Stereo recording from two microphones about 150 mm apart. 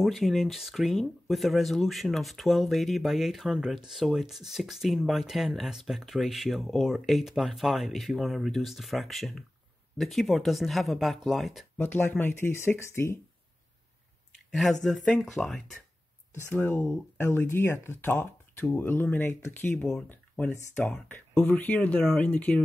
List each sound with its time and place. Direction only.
0.0 s speech: centre (ahead or behind)
11.8 s speech: 15° left (ahead or behind)
14.5 s speech: centre (ahead or behind)
16.4 s speech: 15° left (ahead or behind)